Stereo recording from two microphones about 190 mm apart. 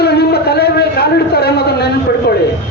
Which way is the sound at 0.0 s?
55° left (ahead or behind).